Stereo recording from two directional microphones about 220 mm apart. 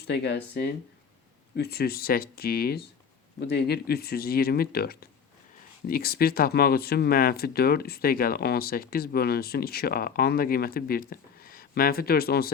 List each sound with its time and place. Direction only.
0.0 s speech: 50° left (ahead or behind)